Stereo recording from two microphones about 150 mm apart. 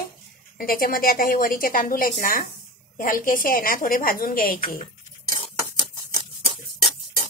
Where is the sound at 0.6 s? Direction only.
75° left (ahead or behind).